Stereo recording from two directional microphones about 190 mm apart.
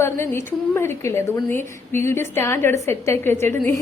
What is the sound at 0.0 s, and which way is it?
A woman's voice, 15° left (ahead or behind).